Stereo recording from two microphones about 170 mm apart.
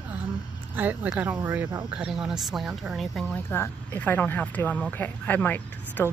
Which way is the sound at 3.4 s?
15° left (ahead or behind).